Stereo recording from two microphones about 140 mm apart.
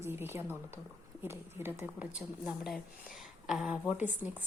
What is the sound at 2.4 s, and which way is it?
Speech, centre (ahead or behind).